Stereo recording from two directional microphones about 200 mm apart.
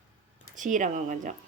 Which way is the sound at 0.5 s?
40° right (ahead or behind).